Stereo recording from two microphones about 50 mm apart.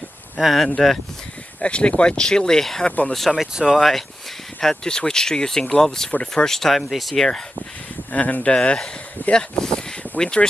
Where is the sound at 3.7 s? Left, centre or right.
Centre.